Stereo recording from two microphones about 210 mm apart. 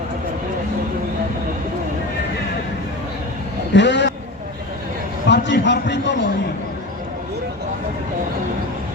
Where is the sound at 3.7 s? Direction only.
55° left (ahead or behind).